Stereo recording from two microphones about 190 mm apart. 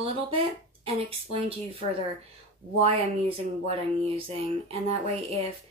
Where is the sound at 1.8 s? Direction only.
45° left (ahead or behind).